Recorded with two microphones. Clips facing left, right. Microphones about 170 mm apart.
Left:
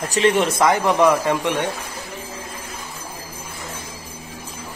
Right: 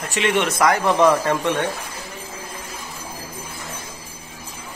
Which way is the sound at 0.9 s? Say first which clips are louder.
Even; 10° left (ahead or behind).